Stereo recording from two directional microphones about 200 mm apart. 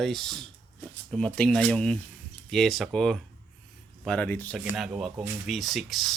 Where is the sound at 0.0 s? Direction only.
Centre (ahead or behind).